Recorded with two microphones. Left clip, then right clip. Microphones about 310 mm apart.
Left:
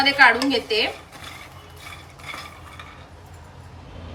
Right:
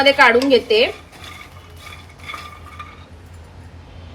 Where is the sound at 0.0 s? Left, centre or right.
Centre.